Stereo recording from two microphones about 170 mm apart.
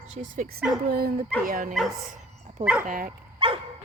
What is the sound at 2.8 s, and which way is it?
Speech, 55° right (ahead or behind).